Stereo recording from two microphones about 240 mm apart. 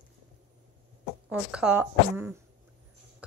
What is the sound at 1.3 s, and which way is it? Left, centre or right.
A woman's voice, centre.